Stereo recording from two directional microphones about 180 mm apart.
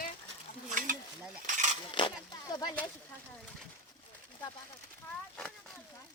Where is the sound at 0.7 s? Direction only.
45° right (ahead or behind).